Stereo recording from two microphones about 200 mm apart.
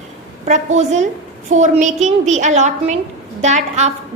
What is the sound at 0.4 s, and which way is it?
A woman's voice, 35° right (ahead or behind).